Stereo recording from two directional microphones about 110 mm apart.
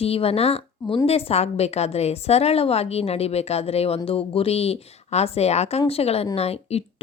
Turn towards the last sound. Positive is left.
turn(degrees=65)  # may be behind; listen again after turning